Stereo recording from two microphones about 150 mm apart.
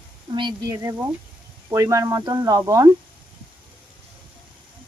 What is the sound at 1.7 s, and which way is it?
Speech, 20° right (ahead or behind).